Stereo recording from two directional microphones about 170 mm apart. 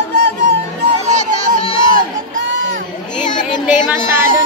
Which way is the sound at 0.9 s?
40° right (ahead or behind).